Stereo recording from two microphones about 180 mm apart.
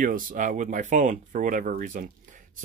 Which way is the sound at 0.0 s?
50° right (ahead or behind).